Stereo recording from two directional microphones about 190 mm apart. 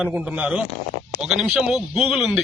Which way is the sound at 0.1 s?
5° right (ahead or behind).